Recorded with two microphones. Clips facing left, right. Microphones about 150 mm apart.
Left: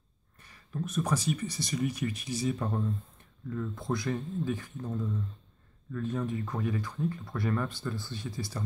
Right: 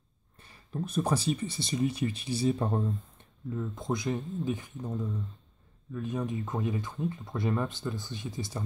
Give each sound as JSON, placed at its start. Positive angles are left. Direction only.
{"t": 0.4, "sound": "speech", "side_deg": -30}
{"t": 3.4, "sound": "speech", "side_deg": -20}